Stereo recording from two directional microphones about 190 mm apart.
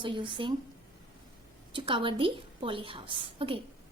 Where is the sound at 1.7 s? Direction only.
25° right (ahead or behind).